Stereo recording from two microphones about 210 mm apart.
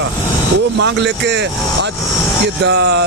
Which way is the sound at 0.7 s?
55° right (ahead or behind).